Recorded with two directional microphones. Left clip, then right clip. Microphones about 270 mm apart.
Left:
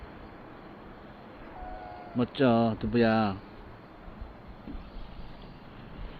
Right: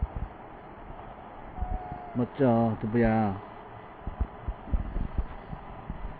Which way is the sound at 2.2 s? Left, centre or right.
Left.